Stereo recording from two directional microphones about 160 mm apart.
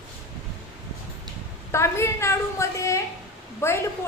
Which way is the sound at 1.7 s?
15° left (ahead or behind).